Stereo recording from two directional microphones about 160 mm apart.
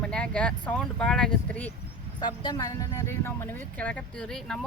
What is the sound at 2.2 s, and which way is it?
Speech, 25° left (ahead or behind).